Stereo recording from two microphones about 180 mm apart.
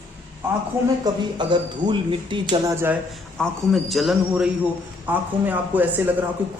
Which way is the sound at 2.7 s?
15° right (ahead or behind).